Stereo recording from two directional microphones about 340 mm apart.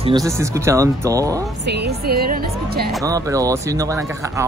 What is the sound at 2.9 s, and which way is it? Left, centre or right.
Speech, centre.